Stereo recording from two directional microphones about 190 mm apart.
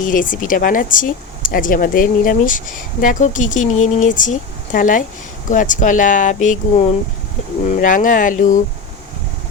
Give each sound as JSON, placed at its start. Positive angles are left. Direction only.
{"t": 0.0, "sound": "speech", "side_deg": 45}